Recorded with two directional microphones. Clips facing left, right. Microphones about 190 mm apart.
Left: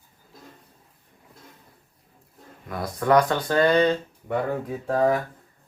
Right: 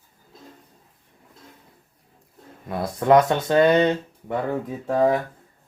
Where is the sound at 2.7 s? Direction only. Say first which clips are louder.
Right 3 dB; 25° right (ahead or behind).